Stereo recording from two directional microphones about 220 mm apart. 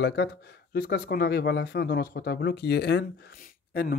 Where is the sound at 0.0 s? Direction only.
50° left (ahead or behind).